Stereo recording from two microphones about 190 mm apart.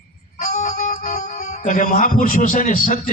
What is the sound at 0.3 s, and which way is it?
Speech, 40° left (ahead or behind).